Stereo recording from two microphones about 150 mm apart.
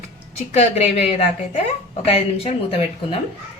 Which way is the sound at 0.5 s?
45° left (ahead or behind).